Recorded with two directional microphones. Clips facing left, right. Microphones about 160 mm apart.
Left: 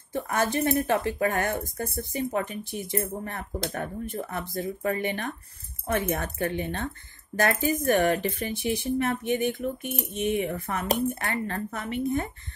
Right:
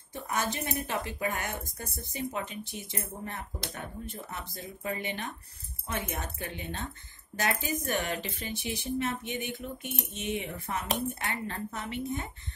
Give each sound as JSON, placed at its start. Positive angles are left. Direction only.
{"t": 0.1, "sound": "speech", "side_deg": 55}